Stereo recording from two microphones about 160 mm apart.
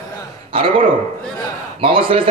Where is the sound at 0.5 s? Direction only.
35° right (ahead or behind).